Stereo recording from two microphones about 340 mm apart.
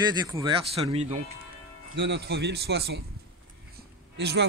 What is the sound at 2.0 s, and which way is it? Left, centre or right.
A man's voice, right.